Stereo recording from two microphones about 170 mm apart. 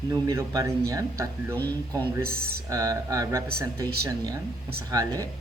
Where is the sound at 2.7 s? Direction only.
20° right (ahead or behind).